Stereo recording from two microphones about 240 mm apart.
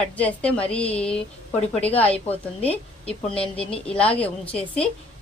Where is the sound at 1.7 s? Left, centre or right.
Left.